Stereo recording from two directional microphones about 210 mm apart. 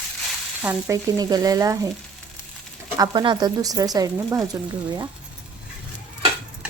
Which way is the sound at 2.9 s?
20° right (ahead or behind).